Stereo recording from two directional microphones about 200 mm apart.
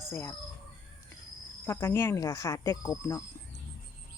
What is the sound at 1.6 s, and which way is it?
Speech, 10° left (ahead or behind).